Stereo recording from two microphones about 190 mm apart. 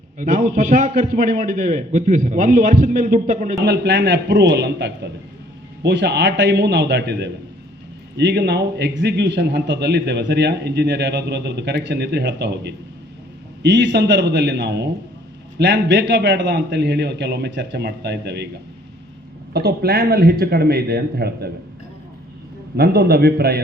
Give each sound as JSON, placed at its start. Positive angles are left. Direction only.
{"t": 0.2, "sound": "a man's voice", "side_deg": -40}
{"t": 3.6, "sound": "a man's voice", "side_deg": -65}
{"t": 19.5, "sound": "a man's voice", "side_deg": -55}
{"t": 22.8, "sound": "a man's voice", "side_deg": -50}